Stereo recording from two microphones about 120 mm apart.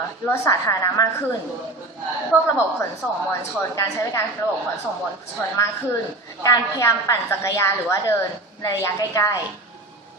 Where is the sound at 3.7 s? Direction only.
25° left (ahead or behind).